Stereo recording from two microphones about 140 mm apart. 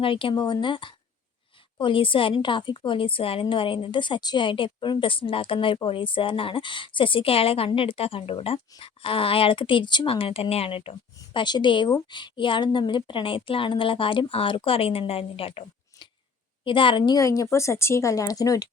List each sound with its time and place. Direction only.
0.0 s a woman's voice: 40° left (ahead or behind)